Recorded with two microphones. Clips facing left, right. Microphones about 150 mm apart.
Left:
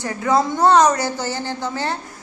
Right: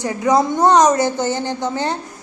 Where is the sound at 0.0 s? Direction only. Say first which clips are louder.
Right 3 dB; 20° right (ahead or behind).